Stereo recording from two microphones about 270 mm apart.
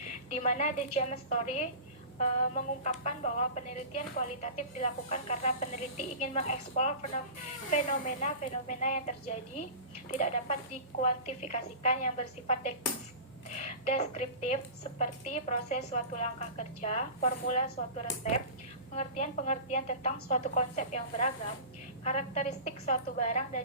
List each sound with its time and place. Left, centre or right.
0.3 s a woman's voice: left